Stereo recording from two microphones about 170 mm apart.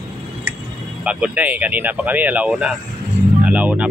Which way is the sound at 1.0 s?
10° right (ahead or behind).